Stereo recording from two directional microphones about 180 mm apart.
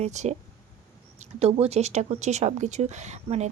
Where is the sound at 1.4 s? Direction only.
35° right (ahead or behind).